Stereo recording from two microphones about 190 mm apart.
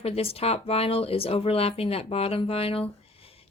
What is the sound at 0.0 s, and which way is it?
Speech, 30° left (ahead or behind).